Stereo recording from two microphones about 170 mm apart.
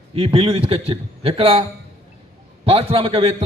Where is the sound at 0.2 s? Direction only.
30° right (ahead or behind).